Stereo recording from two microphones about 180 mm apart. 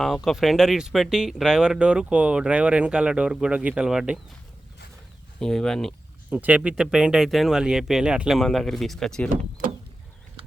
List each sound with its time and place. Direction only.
0.0 s speech: centre (ahead or behind)
5.4 s speech: 5° left (ahead or behind)
6.3 s speech: 5° right (ahead or behind)